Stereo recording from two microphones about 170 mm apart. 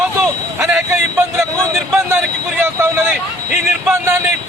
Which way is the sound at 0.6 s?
15° right (ahead or behind).